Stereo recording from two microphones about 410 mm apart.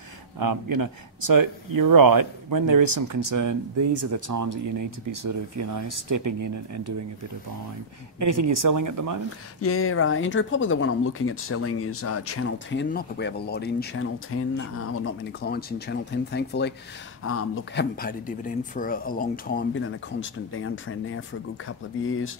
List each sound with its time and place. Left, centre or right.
0.4 s speech: right
8.2 s speech: right
9.6 s speech: left